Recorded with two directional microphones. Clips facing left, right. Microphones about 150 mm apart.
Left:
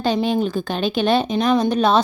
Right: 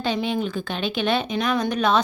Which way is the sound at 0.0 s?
40° left (ahead or behind).